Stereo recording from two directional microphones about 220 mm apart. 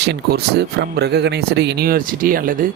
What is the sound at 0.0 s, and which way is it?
Speech, 45° right (ahead or behind).